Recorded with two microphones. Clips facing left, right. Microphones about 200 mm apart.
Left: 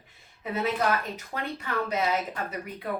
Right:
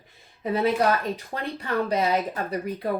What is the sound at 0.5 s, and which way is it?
Speech, 35° right (ahead or behind).